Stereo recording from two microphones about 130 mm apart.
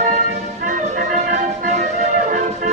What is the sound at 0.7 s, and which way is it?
Music, 85° right.